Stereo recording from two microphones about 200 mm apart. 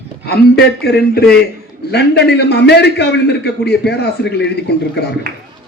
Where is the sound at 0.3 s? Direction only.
55° left (ahead or behind).